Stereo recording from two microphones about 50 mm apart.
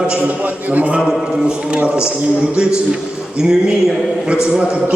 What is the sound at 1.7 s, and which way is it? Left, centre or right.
Speech, centre.